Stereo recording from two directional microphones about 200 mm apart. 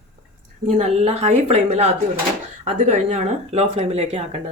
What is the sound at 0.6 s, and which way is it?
Speech, 35° right (ahead or behind).